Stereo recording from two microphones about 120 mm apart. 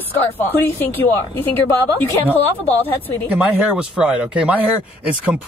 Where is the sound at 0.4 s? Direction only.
15° left (ahead or behind).